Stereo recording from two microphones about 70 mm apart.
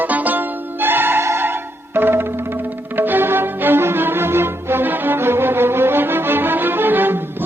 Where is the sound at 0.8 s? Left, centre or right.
Right.